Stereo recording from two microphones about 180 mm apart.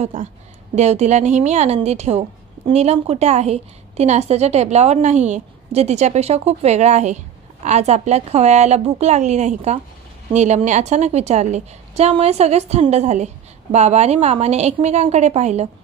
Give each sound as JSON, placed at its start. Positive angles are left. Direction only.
{"t": 0.0, "sound": "a woman's voice", "side_deg": -40}